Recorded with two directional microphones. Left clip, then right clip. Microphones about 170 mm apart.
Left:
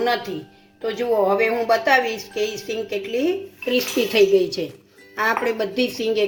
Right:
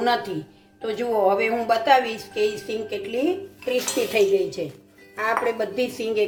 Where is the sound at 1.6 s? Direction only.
40° left (ahead or behind).